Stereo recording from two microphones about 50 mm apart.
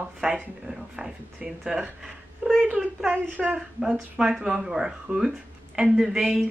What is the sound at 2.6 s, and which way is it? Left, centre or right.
A woman's voice, right.